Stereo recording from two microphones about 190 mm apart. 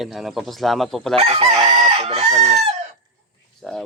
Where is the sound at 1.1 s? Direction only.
30° right (ahead or behind).